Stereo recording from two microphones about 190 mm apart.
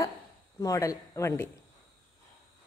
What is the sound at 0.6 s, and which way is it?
Speech, 15° left (ahead or behind).